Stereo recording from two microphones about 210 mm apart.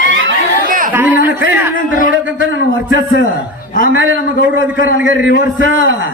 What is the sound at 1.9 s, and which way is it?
Speech, 40° left (ahead or behind).